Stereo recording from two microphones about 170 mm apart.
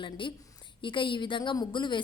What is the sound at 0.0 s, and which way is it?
A woman's voice, 30° left (ahead or behind).